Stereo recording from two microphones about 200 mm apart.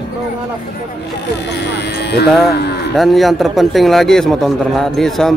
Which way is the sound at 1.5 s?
55° left (ahead or behind).